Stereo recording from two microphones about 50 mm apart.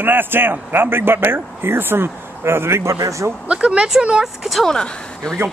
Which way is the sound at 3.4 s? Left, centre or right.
Right.